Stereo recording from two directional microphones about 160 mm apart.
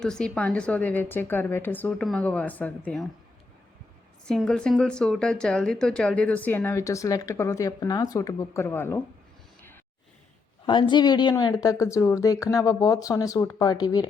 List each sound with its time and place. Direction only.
0.0 s a woman's voice: 5° left (ahead or behind)
4.3 s a woman's voice: 5° left (ahead or behind)
10.7 s speech: 30° left (ahead or behind)